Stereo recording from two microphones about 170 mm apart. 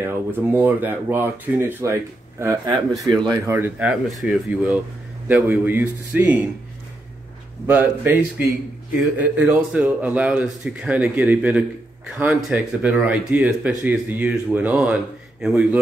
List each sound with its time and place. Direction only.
0.0 s speech: 10° right (ahead or behind)
7.6 s speech: 10° right (ahead or behind)